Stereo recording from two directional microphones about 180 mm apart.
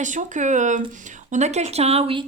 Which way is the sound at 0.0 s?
45° right (ahead or behind).